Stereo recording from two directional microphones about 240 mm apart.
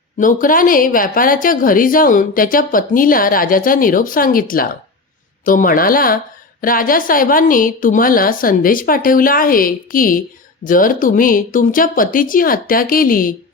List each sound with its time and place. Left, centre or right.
0.2 s a woman's voice: left